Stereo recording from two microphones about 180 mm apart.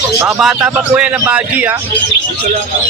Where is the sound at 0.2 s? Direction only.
5° right (ahead or behind).